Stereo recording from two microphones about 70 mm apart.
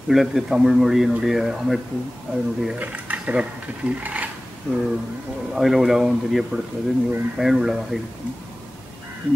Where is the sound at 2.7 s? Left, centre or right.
Right.